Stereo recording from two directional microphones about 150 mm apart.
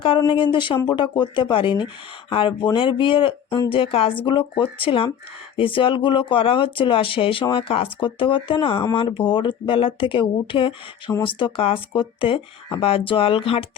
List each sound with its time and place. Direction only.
0.2 s speech: 30° left (ahead or behind)